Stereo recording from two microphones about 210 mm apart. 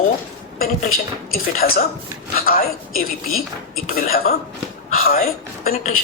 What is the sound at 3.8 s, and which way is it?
A man's voice, 45° left (ahead or behind).